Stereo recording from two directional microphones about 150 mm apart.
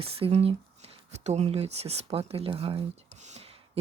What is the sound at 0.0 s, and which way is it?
Speech, 40° right (ahead or behind).